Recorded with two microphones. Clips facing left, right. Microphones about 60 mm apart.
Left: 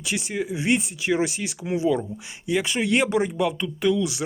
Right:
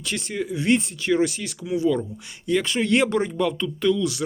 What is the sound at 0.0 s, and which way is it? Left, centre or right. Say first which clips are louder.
Speech: left 1 dB; centre.